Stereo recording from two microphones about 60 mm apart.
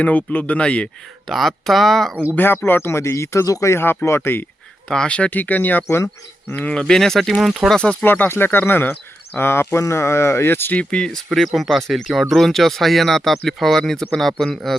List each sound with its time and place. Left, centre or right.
0.0 s speech: left
1.3 s speech: centre
2.3 s speech: left
3.4 s speech: left
3.7 s speech: left
4.9 s speech: centre
6.8 s speech: centre
8.0 s speech: left
9.6 s speech: left
10.8 s speech: centre
11.3 s speech: centre